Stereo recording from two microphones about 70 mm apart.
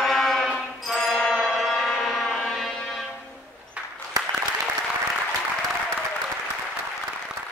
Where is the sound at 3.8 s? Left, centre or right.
Centre.